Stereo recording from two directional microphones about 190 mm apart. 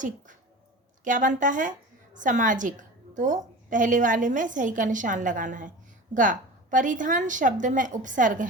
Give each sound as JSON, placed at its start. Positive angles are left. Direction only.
{"t": 1.0, "sound": "a woman's voice", "side_deg": -45}